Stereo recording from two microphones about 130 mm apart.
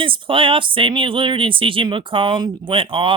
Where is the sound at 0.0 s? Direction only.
40° right (ahead or behind).